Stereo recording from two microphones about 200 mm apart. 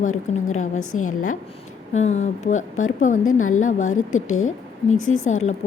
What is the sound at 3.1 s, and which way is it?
Speech, 90° left.